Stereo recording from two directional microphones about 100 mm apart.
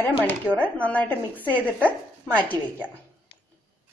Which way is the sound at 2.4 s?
15° left (ahead or behind).